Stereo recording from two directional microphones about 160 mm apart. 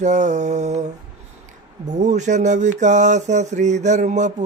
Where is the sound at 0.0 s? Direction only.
45° right (ahead or behind).